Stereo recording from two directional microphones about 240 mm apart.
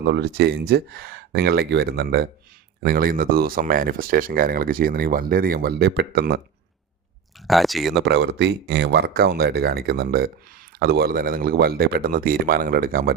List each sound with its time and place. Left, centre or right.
0.0 s speech: right
7.4 s speech: centre
8.0 s speech: right